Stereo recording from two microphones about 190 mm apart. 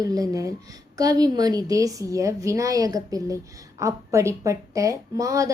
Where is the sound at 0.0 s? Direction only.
20° right (ahead or behind).